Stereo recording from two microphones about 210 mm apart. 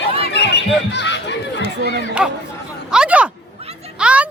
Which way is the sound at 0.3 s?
55° left (ahead or behind).